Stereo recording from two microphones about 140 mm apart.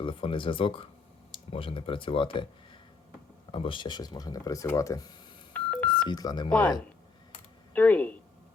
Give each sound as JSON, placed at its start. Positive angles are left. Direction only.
{"t": 0.0, "sound": "speech", "side_deg": 40}
{"t": 3.5, "sound": "speech", "side_deg": 35}
{"t": 5.5, "sound": "telephone dialing", "side_deg": 10}
{"t": 6.1, "sound": "speech", "side_deg": 30}
{"t": 6.5, "sound": "speech", "side_deg": 5}